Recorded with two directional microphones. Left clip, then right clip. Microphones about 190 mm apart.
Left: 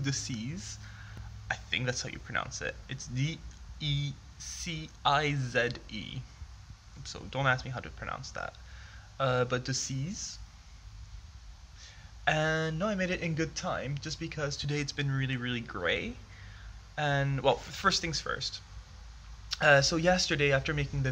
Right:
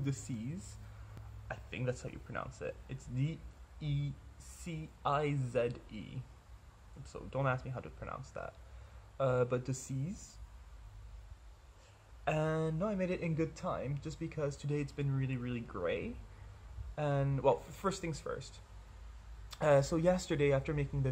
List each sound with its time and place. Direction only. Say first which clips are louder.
0.0 s speech: left 7 dB; 10° right (ahead or behind)
11.8 s speech: left 7 dB; 10° right (ahead or behind)
19.5 s speech: left 6 dB; 15° right (ahead or behind)